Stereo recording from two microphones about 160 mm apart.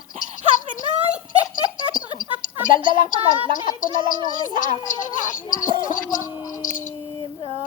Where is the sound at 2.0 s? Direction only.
55° left (ahead or behind).